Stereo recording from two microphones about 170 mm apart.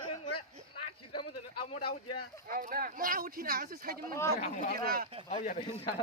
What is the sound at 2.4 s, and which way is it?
Speech, 60° right (ahead or behind).